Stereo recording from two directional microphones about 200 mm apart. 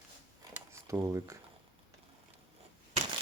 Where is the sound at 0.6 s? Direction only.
15° right (ahead or behind).